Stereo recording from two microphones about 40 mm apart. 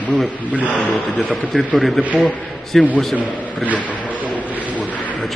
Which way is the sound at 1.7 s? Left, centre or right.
Centre.